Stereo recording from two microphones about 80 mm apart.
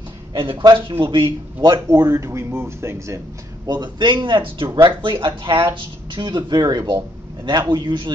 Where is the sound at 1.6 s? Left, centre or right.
Right.